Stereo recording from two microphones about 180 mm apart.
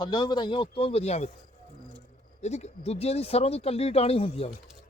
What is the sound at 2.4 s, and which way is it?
Speech, 40° left (ahead or behind).